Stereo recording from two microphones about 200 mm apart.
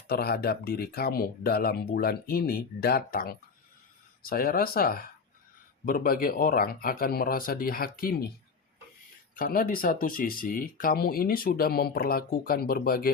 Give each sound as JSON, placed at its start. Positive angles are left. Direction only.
{"t": 0.1, "sound": "speech", "side_deg": 50}
{"t": 9.3, "sound": "speech", "side_deg": 45}